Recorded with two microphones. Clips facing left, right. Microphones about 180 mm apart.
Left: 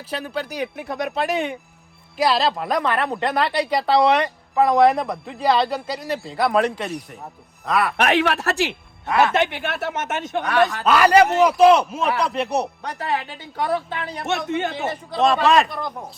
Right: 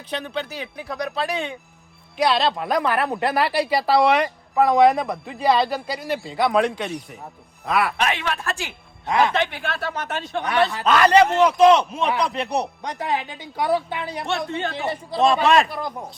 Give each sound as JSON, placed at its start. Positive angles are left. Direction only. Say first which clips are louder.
{"t": 0.1, "sound": "a man's voice", "louder": "left 1 dB", "side_deg": 5}
{"t": 0.9, "sound": "speech", "louder": "left 1 dB", "side_deg": 20}
{"t": 2.1, "sound": "speech", "louder": "even", "side_deg": 0}
{"t": 8.0, "sound": "speech", "louder": "left 5 dB", "side_deg": 75}
{"t": 9.0, "sound": "speech", "louder": "left 1 dB", "side_deg": -15}
{"t": 9.6, "sound": "speech", "louder": "left 2 dB", "side_deg": 20}
{"t": 10.8, "sound": "a man's voice", "louder": "even", "side_deg": 10}
{"t": 12.8, "sound": "speech", "louder": "even", "side_deg": -15}
{"t": 14.3, "sound": "speech", "louder": "left 4 dB", "side_deg": 20}
{"t": 14.8, "sound": "speech", "louder": "even", "side_deg": 0}